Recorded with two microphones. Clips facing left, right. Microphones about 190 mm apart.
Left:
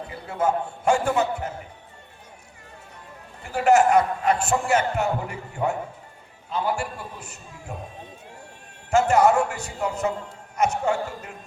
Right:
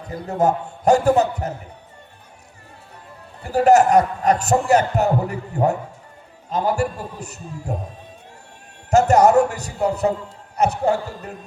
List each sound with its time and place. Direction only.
0.1 s a man's voice: 40° right (ahead or behind)
3.4 s a man's voice: 40° right (ahead or behind)
8.9 s a man's voice: 40° right (ahead or behind)